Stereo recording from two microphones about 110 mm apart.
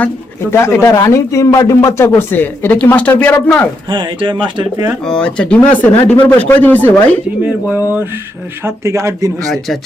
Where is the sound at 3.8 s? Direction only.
45° right (ahead or behind).